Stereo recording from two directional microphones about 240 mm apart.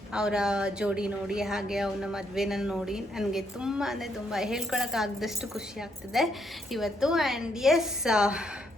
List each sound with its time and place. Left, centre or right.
0.1 s speech: centre